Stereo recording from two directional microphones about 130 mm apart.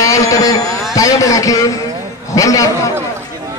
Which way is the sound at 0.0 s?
25° left (ahead or behind).